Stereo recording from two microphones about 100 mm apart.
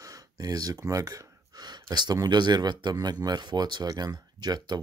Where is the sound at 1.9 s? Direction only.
40° right (ahead or behind).